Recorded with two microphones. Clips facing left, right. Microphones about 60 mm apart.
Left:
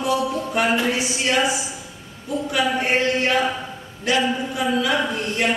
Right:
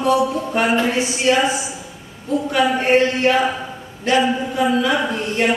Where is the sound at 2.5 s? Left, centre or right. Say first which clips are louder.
Right 5 dB; centre.